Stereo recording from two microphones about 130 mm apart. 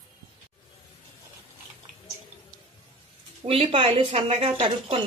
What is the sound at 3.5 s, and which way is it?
Speech, 50° right (ahead or behind).